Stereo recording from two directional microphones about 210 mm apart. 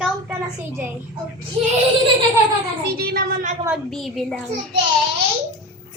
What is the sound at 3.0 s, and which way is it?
Speech, 50° right (ahead or behind).